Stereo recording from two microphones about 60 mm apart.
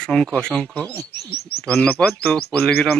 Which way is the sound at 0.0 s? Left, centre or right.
Centre.